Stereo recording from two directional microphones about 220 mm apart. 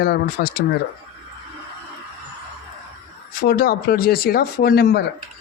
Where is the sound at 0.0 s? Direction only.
45° left (ahead or behind).